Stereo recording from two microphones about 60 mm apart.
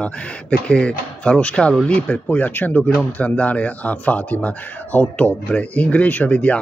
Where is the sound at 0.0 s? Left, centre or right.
Centre.